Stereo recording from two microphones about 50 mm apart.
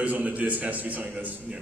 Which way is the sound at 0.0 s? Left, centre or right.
Right.